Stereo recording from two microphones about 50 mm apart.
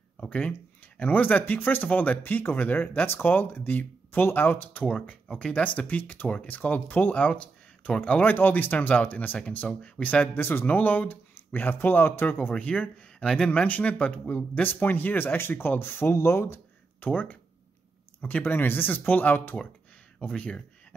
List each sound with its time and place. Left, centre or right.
0.2 s speech: left
4.8 s speech: left
7.2 s a sound: left
8.0 s speech: left
9.8 s speech: left
10.2 s speech: left
12.5 s speech: left
17.1 s speech: left
18.4 s speech: left
20.2 s speech: left